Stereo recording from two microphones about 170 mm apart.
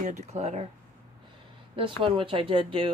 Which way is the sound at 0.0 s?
45° right (ahead or behind).